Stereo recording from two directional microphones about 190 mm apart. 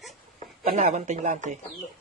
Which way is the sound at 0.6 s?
45° right (ahead or behind).